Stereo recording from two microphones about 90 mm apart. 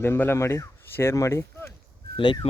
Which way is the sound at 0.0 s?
25° left (ahead or behind).